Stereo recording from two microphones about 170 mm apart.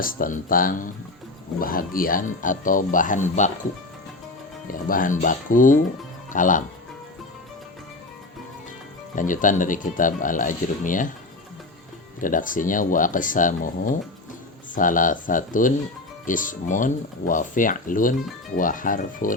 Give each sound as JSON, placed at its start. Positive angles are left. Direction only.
{"t": 0.0, "sound": "speech", "side_deg": 55}
{"t": 4.7, "sound": "speech", "side_deg": 55}
{"t": 9.1, "sound": "speech", "side_deg": 50}
{"t": 12.2, "sound": "speech", "side_deg": 50}